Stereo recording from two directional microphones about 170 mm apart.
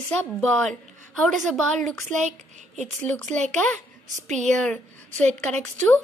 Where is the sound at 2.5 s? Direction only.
45° right (ahead or behind).